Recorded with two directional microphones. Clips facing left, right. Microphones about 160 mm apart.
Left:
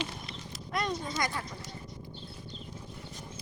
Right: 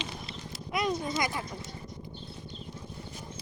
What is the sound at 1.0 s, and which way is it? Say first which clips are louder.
Speech: right 2 dB; 15° right (ahead or behind).